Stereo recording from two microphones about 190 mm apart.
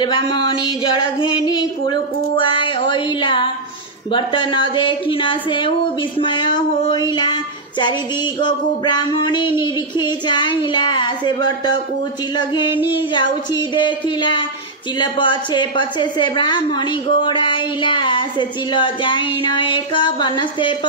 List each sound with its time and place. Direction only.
0.0 s a woman's voice: 25° left (ahead or behind)
8.4 s a woman's voice: 25° left (ahead or behind)
12.8 s a woman's voice: 25° left (ahead or behind)